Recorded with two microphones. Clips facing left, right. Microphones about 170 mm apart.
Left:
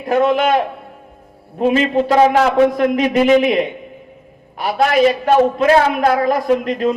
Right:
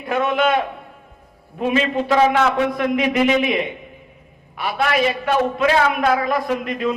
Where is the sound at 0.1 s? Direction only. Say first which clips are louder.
Left 4 dB; 35° left (ahead or behind).